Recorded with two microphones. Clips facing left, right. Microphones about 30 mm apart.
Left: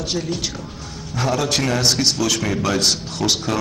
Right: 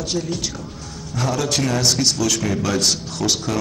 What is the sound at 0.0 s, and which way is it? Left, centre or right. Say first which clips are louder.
A man's voice: even; centre.